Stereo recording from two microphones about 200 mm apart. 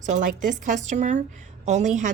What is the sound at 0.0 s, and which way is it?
Speech, 40° right (ahead or behind).